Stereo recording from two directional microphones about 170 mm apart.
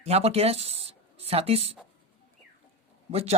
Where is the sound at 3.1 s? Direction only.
35° right (ahead or behind).